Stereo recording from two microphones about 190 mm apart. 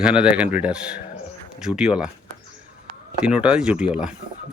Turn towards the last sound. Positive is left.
turn(degrees=-5)  # may be behind; listen again after turning